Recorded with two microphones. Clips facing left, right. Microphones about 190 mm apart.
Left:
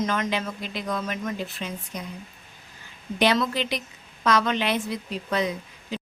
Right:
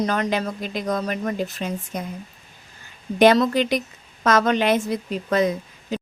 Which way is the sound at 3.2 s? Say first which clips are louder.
Right 7 dB; 45° right (ahead or behind).